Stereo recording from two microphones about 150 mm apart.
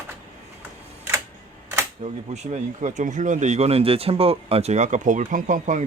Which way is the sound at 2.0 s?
50° right (ahead or behind).